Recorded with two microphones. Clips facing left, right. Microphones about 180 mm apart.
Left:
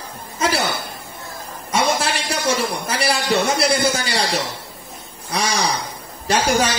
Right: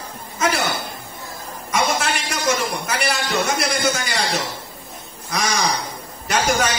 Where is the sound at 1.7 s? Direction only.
30° left (ahead or behind).